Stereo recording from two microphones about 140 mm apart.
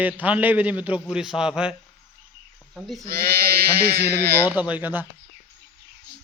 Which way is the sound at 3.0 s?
90° right.